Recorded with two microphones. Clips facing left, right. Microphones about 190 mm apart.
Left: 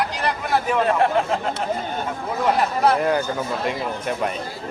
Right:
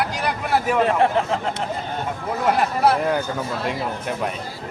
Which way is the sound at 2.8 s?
5° right (ahead or behind).